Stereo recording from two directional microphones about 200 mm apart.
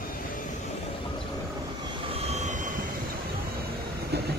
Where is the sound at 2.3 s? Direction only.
40° right (ahead or behind).